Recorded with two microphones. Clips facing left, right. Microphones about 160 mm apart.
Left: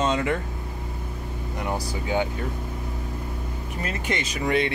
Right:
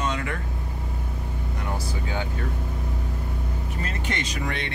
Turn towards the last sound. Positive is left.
turn(degrees=5)  # may be behind; listen again after turning